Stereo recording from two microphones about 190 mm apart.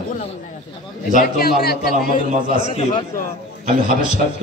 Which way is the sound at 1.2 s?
55° left (ahead or behind).